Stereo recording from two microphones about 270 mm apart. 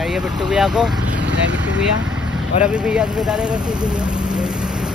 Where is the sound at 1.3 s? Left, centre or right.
Right.